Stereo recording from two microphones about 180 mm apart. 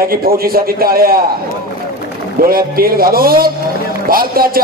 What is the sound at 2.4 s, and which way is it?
Speech, 55° right (ahead or behind).